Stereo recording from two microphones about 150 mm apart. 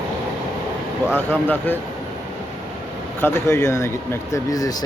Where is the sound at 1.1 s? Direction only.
15° left (ahead or behind).